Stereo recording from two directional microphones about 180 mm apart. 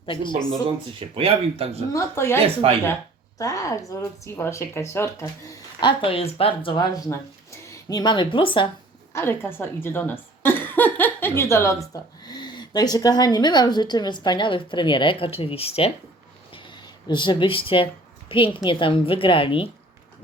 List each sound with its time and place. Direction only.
0.0 s speech: 25° left (ahead or behind)
0.9 s speech: 30° right (ahead or behind)
1.9 s speech: 15° left (ahead or behind)
2.4 s speech: 30° right (ahead or behind)
3.3 s speech: 20° left (ahead or behind)
5.8 s speech: 30° left (ahead or behind)
9.1 s speech: 15° left (ahead or behind); by 15.9 s 35° left (ahead or behind)
17.1 s speech: 25° left (ahead or behind)